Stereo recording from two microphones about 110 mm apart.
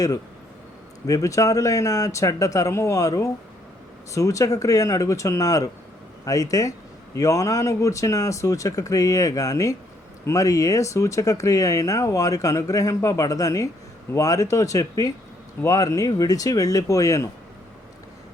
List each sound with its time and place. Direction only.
1.0 s speech: 30° left (ahead or behind)